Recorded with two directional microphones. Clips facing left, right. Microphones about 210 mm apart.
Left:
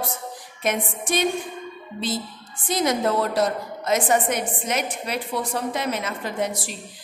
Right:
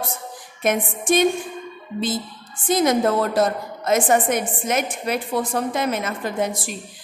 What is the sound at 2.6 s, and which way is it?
A woman's voice, 50° right (ahead or behind).